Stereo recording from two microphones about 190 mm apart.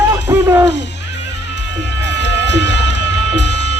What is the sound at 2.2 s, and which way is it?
Run, 65° left (ahead or behind).